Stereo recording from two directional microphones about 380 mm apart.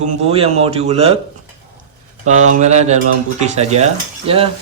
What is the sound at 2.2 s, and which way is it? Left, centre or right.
A man's voice, centre.